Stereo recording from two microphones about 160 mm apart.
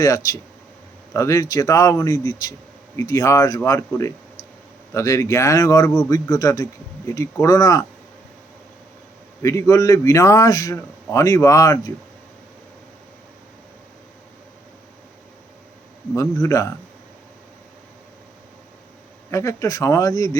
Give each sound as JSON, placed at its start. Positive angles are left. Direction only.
{"t": 0.0, "sound": "a man's voice", "side_deg": 20}
{"t": 9.4, "sound": "a man's voice", "side_deg": 20}
{"t": 16.1, "sound": "a man's voice", "side_deg": 20}
{"t": 19.3, "sound": "a man's voice", "side_deg": 20}